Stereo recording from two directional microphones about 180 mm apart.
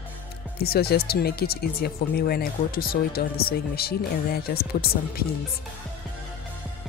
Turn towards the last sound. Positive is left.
turn(degrees=60)  # may be behind; listen again after turning